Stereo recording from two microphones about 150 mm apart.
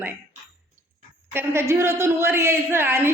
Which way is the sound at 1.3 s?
15° right (ahead or behind).